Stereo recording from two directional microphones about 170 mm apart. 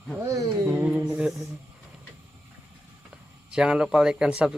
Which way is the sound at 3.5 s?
5° right (ahead or behind).